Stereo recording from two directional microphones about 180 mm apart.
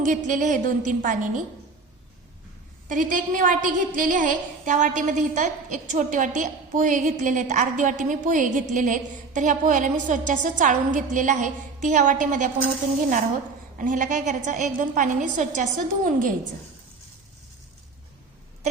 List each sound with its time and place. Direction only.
0.0 s a woman's voice: 45° right (ahead or behind)
2.9 s a woman's voice: 45° right (ahead or behind)